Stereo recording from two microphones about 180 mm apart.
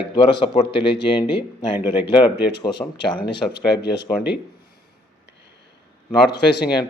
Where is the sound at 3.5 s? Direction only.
65° left (ahead or behind).